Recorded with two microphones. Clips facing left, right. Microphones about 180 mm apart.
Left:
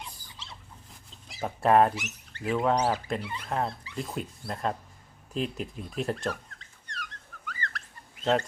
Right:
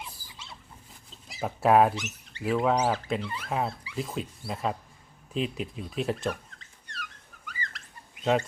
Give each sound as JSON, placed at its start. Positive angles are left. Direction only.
{"t": 0.0, "sound": "rodents", "side_deg": -5}
{"t": 1.3, "sound": "speech", "side_deg": 0}
{"t": 6.6, "sound": "dog", "side_deg": 0}
{"t": 7.4, "sound": "fowl", "side_deg": -15}
{"t": 8.2, "sound": "speech", "side_deg": -10}